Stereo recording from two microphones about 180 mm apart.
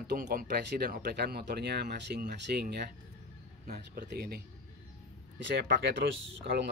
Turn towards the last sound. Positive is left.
turn(degrees=-65)  # may be behind; listen again after turning